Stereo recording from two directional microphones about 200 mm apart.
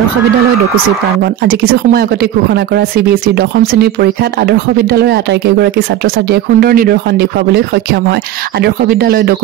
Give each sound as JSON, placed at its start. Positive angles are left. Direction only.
{"t": 1.2, "sound": "speech", "side_deg": -50}